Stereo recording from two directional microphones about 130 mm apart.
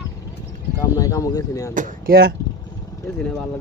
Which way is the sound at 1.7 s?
80° right.